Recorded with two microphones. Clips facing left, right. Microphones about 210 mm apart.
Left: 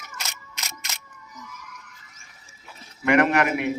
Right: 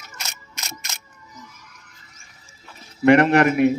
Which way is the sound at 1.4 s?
30° right (ahead or behind).